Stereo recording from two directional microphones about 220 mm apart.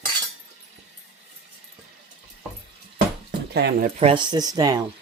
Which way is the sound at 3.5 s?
45° right (ahead or behind).